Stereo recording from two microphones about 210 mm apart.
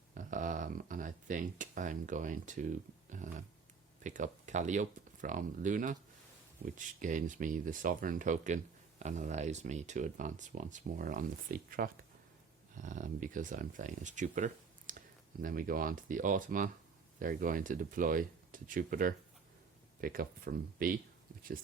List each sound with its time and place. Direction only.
0.1 s speech: 40° right (ahead or behind)